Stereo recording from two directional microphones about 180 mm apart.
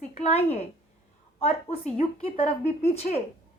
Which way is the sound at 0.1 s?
35° left (ahead or behind).